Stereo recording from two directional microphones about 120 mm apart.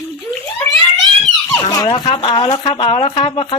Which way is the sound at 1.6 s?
35° left (ahead or behind).